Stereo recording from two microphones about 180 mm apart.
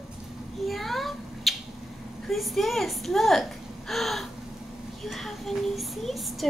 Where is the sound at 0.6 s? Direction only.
Centre (ahead or behind).